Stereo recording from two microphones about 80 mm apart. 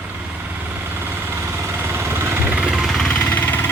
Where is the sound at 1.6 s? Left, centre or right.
Right.